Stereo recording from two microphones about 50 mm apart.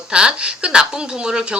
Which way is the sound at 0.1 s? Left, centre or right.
Centre.